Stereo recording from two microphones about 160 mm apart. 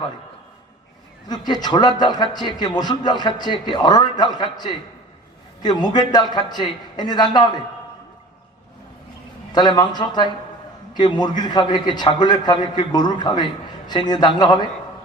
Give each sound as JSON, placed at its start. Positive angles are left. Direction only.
{"t": 1.3, "sound": "a man's voice", "side_deg": 25}
{"t": 9.5, "sound": "a man's voice", "side_deg": 25}